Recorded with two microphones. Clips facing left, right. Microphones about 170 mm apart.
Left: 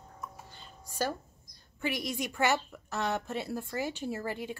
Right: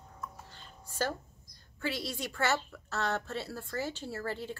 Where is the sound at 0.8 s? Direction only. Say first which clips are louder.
Left 1 dB; 10° left (ahead or behind).